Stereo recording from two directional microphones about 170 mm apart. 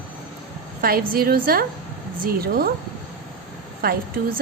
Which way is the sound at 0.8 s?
60° right (ahead or behind).